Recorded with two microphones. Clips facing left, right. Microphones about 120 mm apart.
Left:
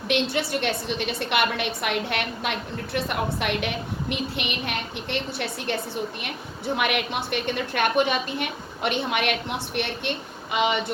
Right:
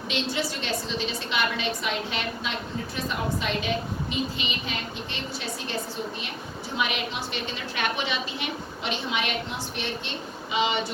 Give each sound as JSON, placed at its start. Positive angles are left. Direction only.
{"t": 0.1, "sound": "a woman's voice", "side_deg": 60}
{"t": 6.7, "sound": "a woman's voice", "side_deg": 60}